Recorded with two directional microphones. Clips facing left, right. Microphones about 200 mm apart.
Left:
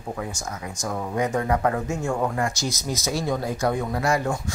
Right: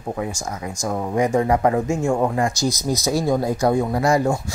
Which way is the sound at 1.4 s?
25° right (ahead or behind).